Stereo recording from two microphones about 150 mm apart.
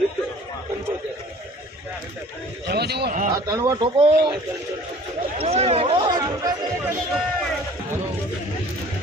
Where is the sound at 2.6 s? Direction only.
90° right.